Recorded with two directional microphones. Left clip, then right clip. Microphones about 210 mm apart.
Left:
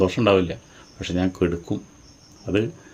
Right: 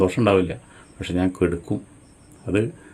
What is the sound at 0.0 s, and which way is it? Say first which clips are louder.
Speech: even; 5° right (ahead or behind).